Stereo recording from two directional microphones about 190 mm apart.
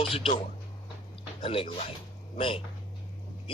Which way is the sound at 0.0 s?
30° left (ahead or behind).